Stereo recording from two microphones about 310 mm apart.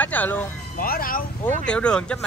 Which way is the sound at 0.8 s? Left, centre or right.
Left.